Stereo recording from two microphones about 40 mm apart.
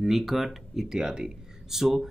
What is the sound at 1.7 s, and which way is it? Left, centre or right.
Speech, centre.